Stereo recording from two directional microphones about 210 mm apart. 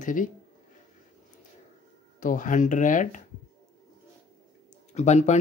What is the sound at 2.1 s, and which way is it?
Speech, 40° left (ahead or behind).